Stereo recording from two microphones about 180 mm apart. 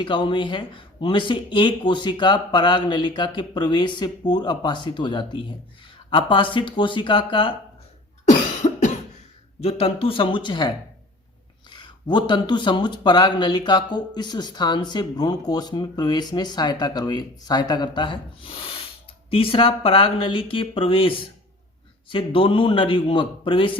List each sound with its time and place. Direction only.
0.0 s speech: 25° left (ahead or behind)
8.2 s cough: 40° left (ahead or behind)
9.6 s speech: 35° left (ahead or behind)
11.7 s speech: 25° left (ahead or behind)